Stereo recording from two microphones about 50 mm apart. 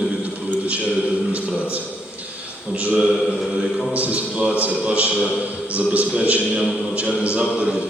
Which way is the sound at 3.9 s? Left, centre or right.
Right.